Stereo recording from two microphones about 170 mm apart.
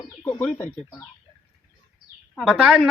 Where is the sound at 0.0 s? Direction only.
25° left (ahead or behind).